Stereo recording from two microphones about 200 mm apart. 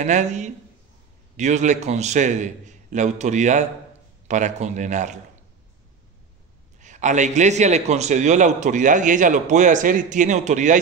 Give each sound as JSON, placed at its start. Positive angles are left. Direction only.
{"t": 0.0, "sound": "a man's voice", "side_deg": -35}
{"t": 6.8, "sound": "a man's voice", "side_deg": -35}